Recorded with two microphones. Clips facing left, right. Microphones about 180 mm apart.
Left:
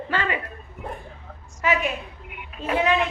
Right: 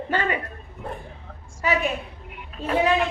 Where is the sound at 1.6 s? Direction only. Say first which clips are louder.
Even; 35° right (ahead or behind).